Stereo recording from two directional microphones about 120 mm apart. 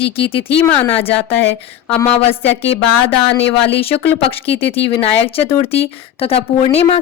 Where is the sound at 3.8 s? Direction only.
55° left (ahead or behind).